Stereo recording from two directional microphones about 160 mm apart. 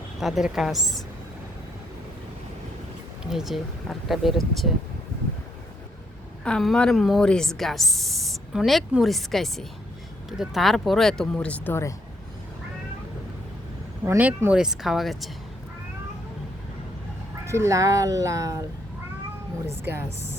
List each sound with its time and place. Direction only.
0.2 s speech: centre (ahead or behind)
3.2 s speech: centre (ahead or behind)
6.4 s speech: 5° left (ahead or behind)
14.0 s speech: 15° right (ahead or behind)
17.4 s speech: 20° right (ahead or behind)
19.8 s a woman's voice: 15° right (ahead or behind)